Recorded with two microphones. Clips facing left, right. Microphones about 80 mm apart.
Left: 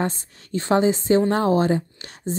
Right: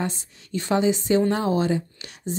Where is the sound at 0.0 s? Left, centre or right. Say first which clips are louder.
Left 3 dB; left.